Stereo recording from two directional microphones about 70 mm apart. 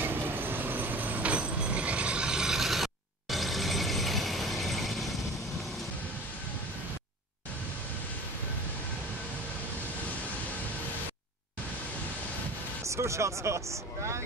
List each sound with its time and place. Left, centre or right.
0.0 s vehicle: right; by 4.9 s centre
12.8 s speech: right